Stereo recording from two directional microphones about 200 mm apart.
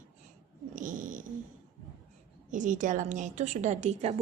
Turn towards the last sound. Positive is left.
turn(degrees=-35)  # may be behind; listen again after turning